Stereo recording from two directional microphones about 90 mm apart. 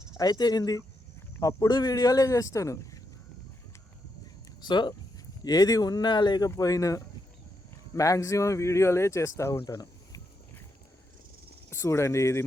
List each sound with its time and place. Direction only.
0.2 s speech: 45° left (ahead or behind)
4.6 s speech: 55° left (ahead or behind)
6.6 s speech: 40° left (ahead or behind)
9.6 s a sound: 45° left (ahead or behind)
11.7 s speech: 30° left (ahead or behind)